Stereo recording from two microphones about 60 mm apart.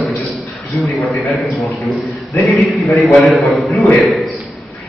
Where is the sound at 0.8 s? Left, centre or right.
Centre.